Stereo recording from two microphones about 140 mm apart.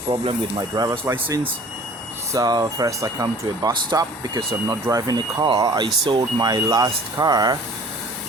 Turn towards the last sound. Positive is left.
turn(degrees=-30)  # may be behind; listen again after turning